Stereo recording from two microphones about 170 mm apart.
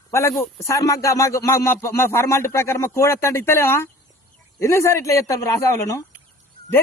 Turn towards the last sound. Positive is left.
turn(degrees=15)  # may be behind; listen again after turning